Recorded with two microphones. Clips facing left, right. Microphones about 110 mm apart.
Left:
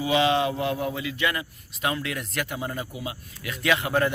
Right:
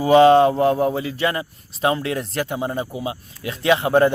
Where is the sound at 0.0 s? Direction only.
45° right (ahead or behind).